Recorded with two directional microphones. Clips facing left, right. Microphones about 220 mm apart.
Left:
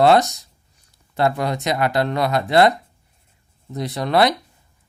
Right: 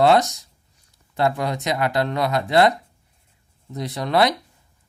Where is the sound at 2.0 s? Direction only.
60° left (ahead or behind).